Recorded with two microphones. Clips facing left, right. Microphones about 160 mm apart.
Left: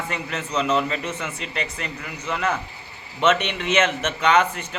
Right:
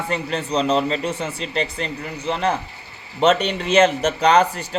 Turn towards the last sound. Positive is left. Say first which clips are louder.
# right 3 dB
turn(degrees=-35)  # may be behind; listen again after turning